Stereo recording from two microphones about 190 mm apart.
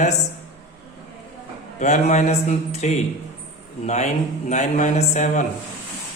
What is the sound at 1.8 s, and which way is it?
Speech, 40° left (ahead or behind).